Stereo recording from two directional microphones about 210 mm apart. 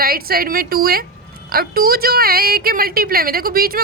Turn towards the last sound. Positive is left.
turn(degrees=-45)  # may be behind; listen again after turning